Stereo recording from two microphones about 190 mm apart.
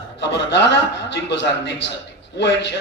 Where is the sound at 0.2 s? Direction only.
65° left (ahead or behind).